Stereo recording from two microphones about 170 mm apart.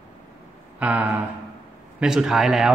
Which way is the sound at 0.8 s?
10° right (ahead or behind).